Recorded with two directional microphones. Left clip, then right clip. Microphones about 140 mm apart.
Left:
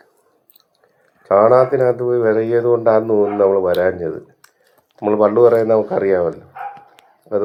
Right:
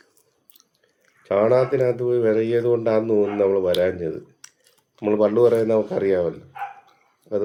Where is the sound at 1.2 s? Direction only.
20° right (ahead or behind).